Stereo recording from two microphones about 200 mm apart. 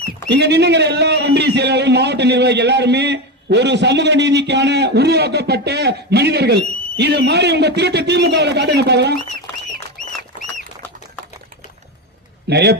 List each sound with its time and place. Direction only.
0.3 s a man's voice: 55° right (ahead or behind)
12.5 s a man's voice: 55° right (ahead or behind)